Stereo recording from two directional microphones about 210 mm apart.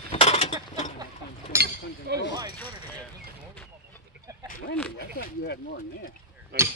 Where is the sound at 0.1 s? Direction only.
30° left (ahead or behind).